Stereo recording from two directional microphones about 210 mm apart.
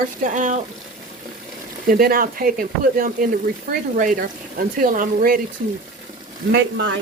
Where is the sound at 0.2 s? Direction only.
35° right (ahead or behind).